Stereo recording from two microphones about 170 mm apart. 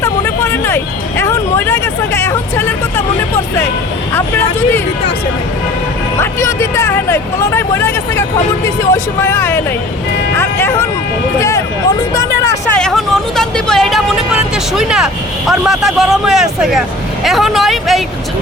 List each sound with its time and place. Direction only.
0.0 s vehicle: 15° left (ahead or behind)
1.2 s speech: 15° left (ahead or behind)
4.1 s speech: 15° left (ahead or behind)
6.1 s speech: 15° left (ahead or behind)
12.7 s speech: 5° left (ahead or behind)